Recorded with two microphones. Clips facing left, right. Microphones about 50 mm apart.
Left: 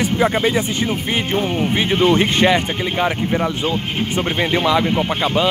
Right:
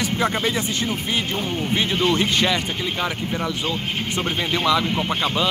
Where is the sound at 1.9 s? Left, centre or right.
Left.